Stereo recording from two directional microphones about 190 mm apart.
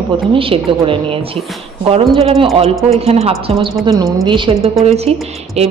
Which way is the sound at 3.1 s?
30° right (ahead or behind).